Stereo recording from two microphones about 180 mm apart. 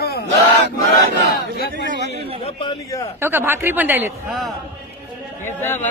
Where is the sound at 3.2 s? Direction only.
10° right (ahead or behind).